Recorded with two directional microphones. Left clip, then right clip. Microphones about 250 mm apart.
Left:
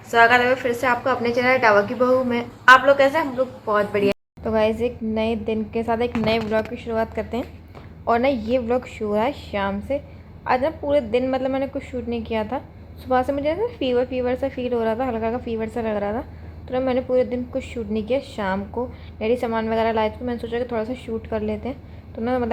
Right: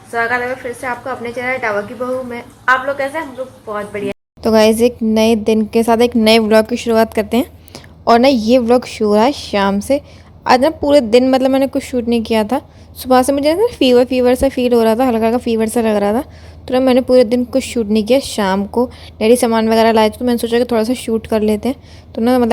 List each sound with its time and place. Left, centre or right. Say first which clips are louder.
0.1 s a woman's voice: left 2 dB; centre
4.4 s a woman's voice: right 10 dB; right